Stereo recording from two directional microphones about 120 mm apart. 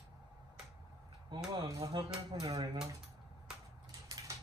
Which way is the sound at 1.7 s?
30° right (ahead or behind).